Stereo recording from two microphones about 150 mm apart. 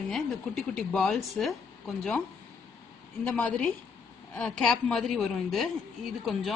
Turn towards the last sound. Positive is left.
turn(degrees=0)  # may be behind; listen again after turning